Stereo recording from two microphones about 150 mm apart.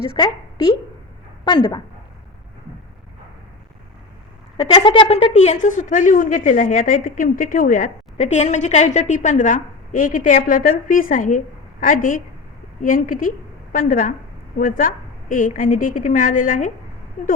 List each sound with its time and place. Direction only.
0.1 s a woman's voice: 30° left (ahead or behind)
4.5 s a woman's voice: 35° left (ahead or behind); by 16.7 s 60° left (ahead or behind)